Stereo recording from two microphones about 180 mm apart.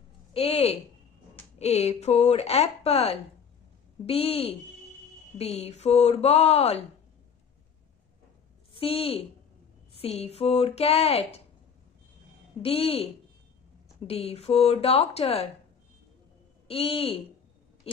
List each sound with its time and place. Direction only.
0.3 s speech: 35° left (ahead or behind)
5.6 s speech: 35° left (ahead or behind)
8.7 s speech: 30° left (ahead or behind)
12.6 s speech: 30° left (ahead or behind)
16.6 s speech: 30° left (ahead or behind)